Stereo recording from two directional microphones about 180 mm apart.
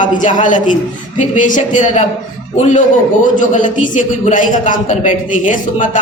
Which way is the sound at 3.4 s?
45° left (ahead or behind).